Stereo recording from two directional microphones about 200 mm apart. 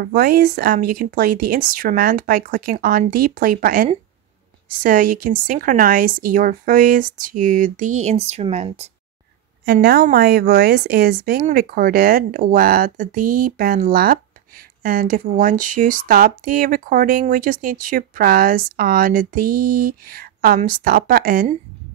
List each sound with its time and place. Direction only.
0.0 s speech: 45° right (ahead or behind); by 8.8 s 30° right (ahead or behind)
9.7 s speech: 50° right (ahead or behind)